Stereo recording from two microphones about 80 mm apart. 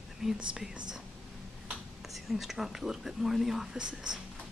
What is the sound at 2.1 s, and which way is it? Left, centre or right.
Speech, centre.